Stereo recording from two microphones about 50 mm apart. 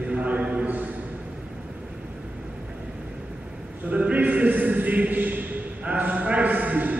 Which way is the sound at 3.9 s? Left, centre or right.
Right.